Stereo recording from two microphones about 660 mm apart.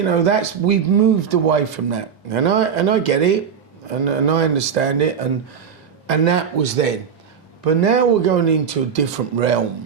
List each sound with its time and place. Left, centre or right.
0.0 s speech: right